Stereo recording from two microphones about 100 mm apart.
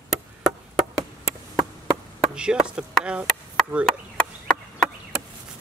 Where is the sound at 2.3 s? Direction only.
10° right (ahead or behind).